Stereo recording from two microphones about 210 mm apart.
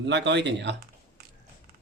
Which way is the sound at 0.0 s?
55° right (ahead or behind).